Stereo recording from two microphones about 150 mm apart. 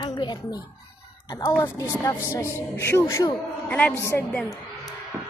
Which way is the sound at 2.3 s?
20° left (ahead or behind).